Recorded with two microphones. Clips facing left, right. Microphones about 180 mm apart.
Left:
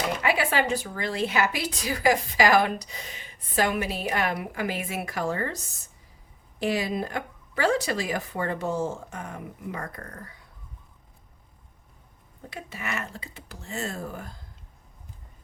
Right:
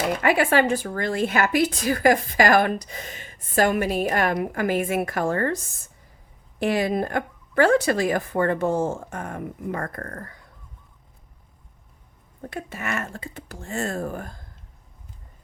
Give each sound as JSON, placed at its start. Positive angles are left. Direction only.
{"t": 0.2, "sound": "speech", "side_deg": -50}
{"t": 6.6, "sound": "speech", "side_deg": -55}
{"t": 12.4, "sound": "speech", "side_deg": -50}